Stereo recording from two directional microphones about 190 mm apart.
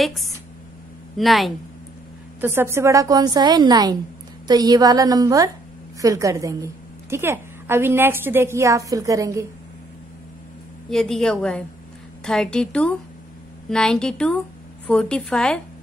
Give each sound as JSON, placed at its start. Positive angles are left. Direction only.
{"t": 0.0, "sound": "a woman's voice", "side_deg": 0}
{"t": 2.4, "sound": "a woman's voice", "side_deg": -10}
{"t": 10.9, "sound": "a woman's voice", "side_deg": 0}